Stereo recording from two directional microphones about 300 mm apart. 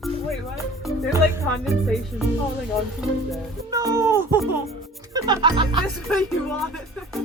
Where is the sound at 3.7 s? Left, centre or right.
Centre.